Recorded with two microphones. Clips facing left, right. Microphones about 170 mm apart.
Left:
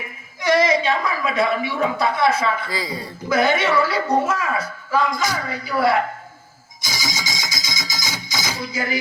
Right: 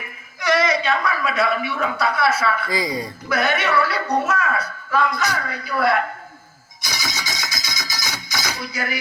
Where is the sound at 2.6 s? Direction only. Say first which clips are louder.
Right 4 dB; 15° right (ahead or behind).